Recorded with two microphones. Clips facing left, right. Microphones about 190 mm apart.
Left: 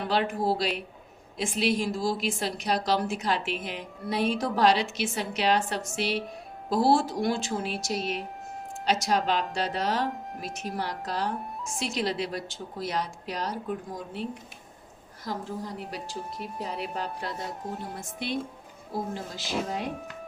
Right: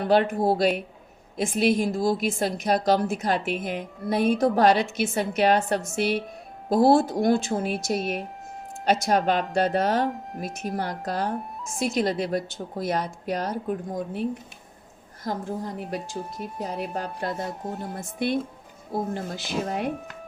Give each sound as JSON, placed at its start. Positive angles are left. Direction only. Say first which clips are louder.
{"t": 0.0, "sound": "a woman's voice", "louder": "right 6 dB", "side_deg": -50}